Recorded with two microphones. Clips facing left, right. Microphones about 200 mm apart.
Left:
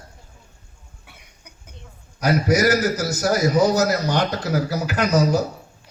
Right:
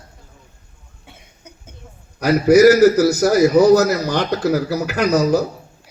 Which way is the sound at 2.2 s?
60° right (ahead or behind).